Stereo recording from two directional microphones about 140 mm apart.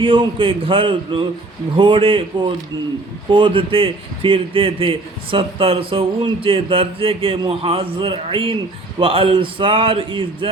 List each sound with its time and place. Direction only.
0.0 s a man's voice: 40° right (ahead or behind)